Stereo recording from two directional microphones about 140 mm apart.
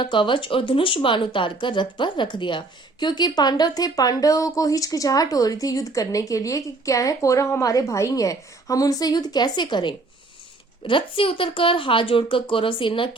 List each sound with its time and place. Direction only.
0.0 s speech: 35° left (ahead or behind)